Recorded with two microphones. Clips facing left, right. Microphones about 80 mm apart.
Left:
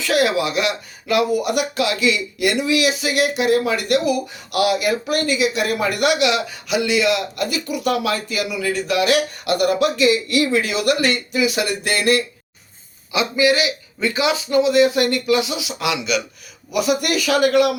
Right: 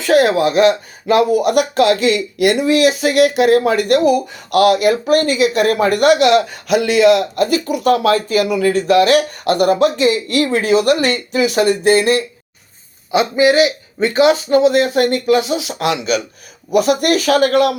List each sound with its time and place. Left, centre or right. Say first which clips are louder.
0.0 s speech: right 6 dB; right
13.1 s speech: right 5 dB; right